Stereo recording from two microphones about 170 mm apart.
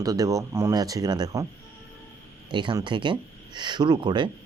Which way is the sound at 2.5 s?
25° right (ahead or behind).